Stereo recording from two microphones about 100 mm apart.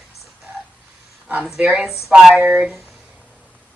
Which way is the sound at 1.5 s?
10° right (ahead or behind).